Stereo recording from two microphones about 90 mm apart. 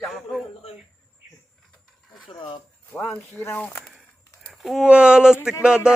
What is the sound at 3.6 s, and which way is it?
Speech, 15° left (ahead or behind).